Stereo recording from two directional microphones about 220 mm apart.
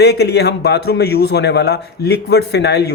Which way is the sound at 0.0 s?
45° left (ahead or behind).